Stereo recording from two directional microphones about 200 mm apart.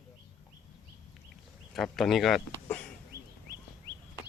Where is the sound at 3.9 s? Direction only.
25° right (ahead or behind).